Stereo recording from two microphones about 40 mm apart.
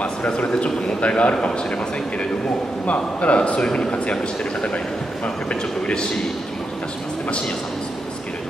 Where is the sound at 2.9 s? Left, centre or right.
Left.